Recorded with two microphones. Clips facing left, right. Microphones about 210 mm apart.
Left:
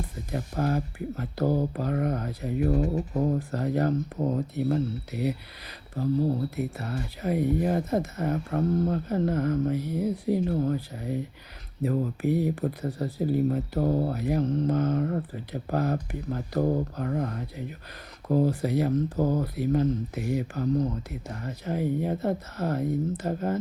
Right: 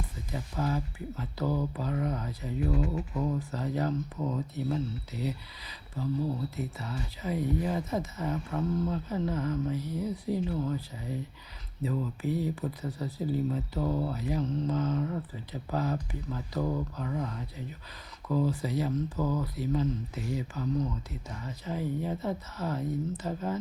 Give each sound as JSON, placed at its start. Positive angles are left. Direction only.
{"t": 0.3, "sound": "speech", "side_deg": 55}
{"t": 1.5, "sound": "speech", "side_deg": 35}
{"t": 1.7, "sound": "speech", "side_deg": 55}
{"t": 3.3, "sound": "speech", "side_deg": 55}
{"t": 13.8, "sound": "speech", "side_deg": 35}
{"t": 14.1, "sound": "speech", "side_deg": 60}
{"t": 16.6, "sound": "speech", "side_deg": 35}
{"t": 17.0, "sound": "speech", "side_deg": 55}